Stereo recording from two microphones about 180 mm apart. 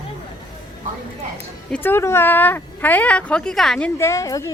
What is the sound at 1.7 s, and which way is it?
Speech, 10° left (ahead or behind).